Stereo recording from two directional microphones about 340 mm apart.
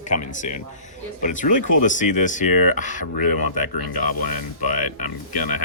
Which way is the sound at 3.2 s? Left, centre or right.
Left.